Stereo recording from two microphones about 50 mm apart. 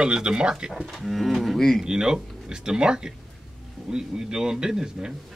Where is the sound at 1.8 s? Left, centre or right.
Centre.